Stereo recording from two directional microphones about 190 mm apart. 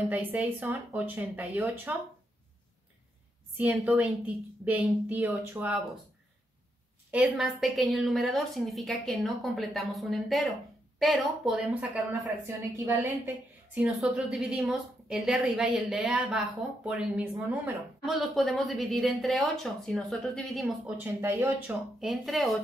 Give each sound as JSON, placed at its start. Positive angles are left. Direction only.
{"t": 0.1, "sound": "speech", "side_deg": -10}
{"t": 3.5, "sound": "speech", "side_deg": -10}
{"t": 7.1, "sound": "a woman's voice", "side_deg": -5}
{"t": 13.9, "sound": "a woman's voice", "side_deg": 0}
{"t": 21.2, "sound": "speech", "side_deg": -15}
{"t": 22.0, "sound": "a woman's voice", "side_deg": 0}